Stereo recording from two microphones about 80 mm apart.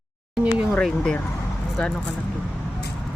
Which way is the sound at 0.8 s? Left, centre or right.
Centre.